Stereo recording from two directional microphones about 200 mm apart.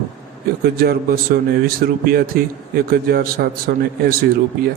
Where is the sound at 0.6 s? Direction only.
50° right (ahead or behind).